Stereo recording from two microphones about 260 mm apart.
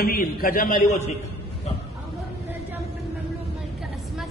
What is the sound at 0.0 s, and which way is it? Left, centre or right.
A man's voice, left.